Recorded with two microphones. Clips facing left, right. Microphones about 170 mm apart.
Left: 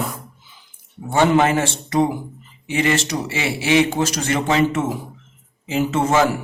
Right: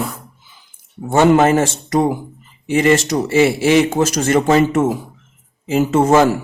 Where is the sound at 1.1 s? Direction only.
40° right (ahead or behind).